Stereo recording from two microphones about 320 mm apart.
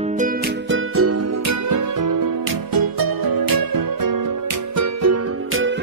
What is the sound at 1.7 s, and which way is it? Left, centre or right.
Music, right.